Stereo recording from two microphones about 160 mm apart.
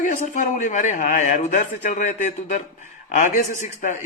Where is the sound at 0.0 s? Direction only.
50° left (ahead or behind).